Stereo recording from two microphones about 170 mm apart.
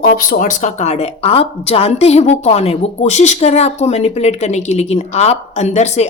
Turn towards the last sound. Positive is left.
turn(degrees=40)  # may be behind; listen again after turning